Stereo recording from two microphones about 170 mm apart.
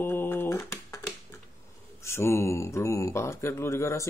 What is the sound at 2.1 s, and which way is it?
Speech, 15° left (ahead or behind).